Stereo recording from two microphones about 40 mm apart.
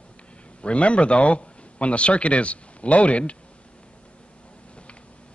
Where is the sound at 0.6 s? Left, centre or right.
Left.